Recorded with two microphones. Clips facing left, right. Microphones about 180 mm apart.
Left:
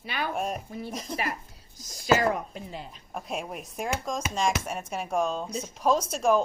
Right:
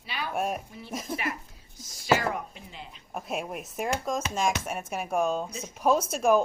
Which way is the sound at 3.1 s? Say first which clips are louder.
Right 1 dB; centre (ahead or behind).